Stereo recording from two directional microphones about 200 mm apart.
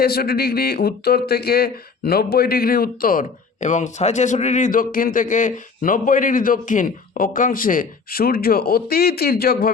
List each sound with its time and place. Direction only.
0.0 s speech: 50° left (ahead or behind)